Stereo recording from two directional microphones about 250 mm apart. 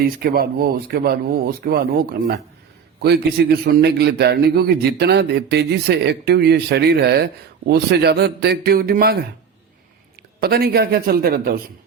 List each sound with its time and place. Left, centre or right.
0.2 s a man's voice: right
10.4 s a man's voice: right